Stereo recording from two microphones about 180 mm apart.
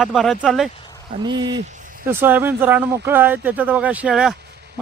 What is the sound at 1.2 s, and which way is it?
Speech, 25° right (ahead or behind).